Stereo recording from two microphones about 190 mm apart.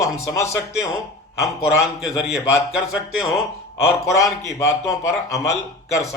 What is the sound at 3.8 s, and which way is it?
Speech, 15° left (ahead or behind).